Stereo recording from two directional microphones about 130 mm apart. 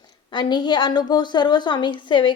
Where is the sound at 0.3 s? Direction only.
35° left (ahead or behind).